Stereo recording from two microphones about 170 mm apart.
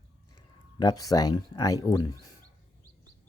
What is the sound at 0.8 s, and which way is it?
Speech, 20° left (ahead or behind).